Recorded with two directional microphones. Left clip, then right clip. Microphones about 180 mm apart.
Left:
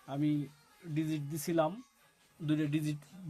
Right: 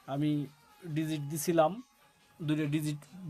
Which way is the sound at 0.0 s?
35° right (ahead or behind).